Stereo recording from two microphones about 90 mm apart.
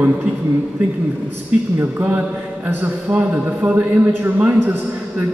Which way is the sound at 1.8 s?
20° right (ahead or behind).